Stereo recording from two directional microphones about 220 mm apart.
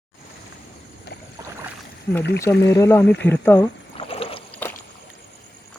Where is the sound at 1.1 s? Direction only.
50° left (ahead or behind).